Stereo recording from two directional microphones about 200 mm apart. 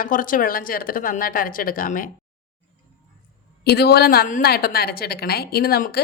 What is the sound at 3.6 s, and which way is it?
A woman's voice, 55° left (ahead or behind).